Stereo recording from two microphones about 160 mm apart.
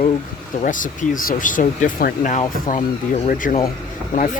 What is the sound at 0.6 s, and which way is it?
Speech, 55° left (ahead or behind).